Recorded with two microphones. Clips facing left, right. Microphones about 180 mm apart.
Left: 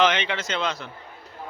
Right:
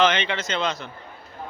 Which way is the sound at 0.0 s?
10° left (ahead or behind).